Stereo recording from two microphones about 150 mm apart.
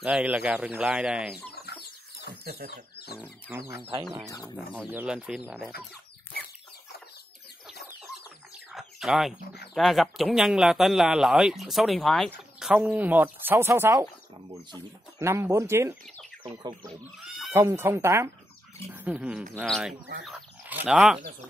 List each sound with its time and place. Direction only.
0.0 s speech: 10° right (ahead or behind)
1.7 s chicken: 90° left
2.4 s speech: 90° right
3.2 s speech: 15° right (ahead or behind)
4.8 s speech: 10° right (ahead or behind)
8.7 s chicken: centre (ahead or behind)
9.8 s speech: centre (ahead or behind); by 14.0 s 15° right (ahead or behind)
15.1 s speech: 20° right (ahead or behind)
17.5 s speech: 15° right (ahead or behind); by 20.0 s centre (ahead or behind)
20.2 s chicken: 5° right (ahead or behind)